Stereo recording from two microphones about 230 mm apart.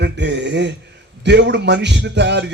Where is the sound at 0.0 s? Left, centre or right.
Right.